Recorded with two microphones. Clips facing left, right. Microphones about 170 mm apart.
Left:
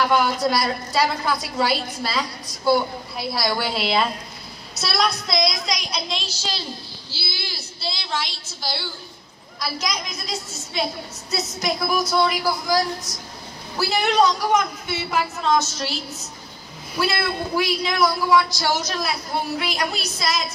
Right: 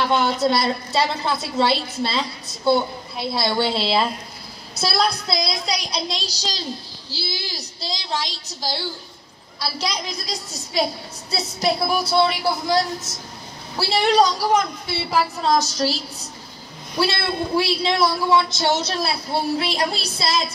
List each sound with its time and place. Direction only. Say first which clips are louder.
0.0 s a woman's voice: even; 25° right (ahead or behind)
17.0 s a woman's voice: right 1 dB; 30° right (ahead or behind)